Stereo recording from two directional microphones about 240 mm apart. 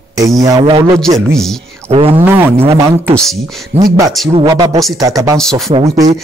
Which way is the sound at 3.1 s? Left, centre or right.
Centre.